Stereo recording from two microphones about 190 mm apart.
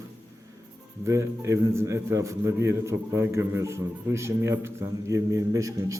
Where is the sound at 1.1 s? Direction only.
15° right (ahead or behind).